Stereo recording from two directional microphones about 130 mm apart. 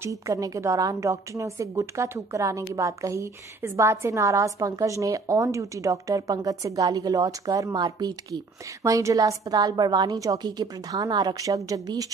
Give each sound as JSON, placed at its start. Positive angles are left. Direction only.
{"t": 0.0, "sound": "a woman's voice", "side_deg": -25}